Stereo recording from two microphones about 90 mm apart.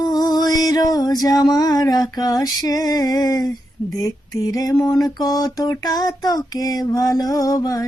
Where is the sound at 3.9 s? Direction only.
40° left (ahead or behind).